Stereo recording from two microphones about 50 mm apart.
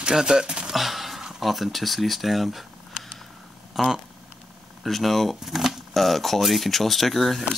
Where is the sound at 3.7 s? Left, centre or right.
Centre.